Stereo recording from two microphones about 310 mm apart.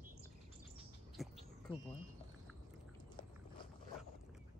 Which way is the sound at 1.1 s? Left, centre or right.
Centre.